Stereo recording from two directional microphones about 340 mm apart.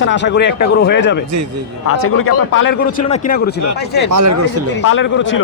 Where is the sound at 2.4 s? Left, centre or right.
Left.